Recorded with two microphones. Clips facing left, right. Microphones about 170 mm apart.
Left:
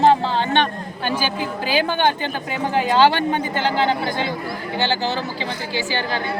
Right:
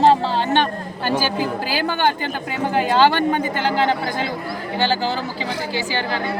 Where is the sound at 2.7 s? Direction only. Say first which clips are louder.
Even; 45° right (ahead or behind).